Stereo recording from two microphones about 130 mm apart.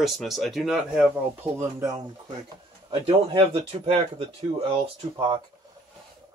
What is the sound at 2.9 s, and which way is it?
Speech, 40° right (ahead or behind).